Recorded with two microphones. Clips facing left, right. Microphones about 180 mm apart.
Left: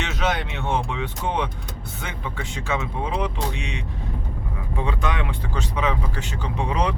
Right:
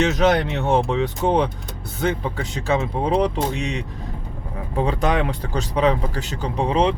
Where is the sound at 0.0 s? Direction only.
40° right (ahead or behind).